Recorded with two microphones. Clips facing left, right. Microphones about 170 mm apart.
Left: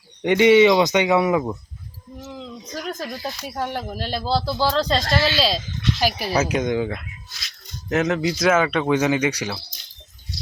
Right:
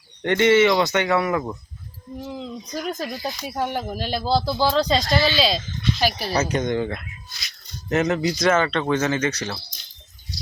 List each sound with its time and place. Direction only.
0.2 s speech: 15° left (ahead or behind)
2.2 s speech: 10° right (ahead or behind); by 9.6 s 10° left (ahead or behind)